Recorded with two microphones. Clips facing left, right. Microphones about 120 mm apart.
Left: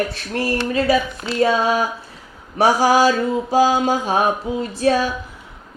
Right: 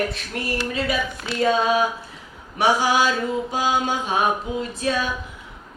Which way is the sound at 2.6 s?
40° left (ahead or behind).